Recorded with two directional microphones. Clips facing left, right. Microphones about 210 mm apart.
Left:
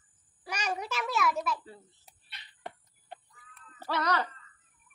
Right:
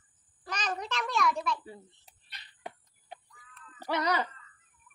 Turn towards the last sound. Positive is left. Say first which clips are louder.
# right 1 dB
turn(degrees=-15)  # may be behind; listen again after turning